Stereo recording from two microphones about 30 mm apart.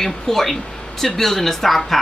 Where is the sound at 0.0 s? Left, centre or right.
Centre.